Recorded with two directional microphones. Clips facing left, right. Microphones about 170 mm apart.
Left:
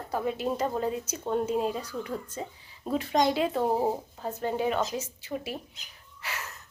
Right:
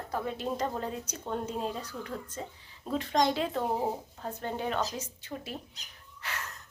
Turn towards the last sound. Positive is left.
turn(degrees=5)  # may be behind; listen again after turning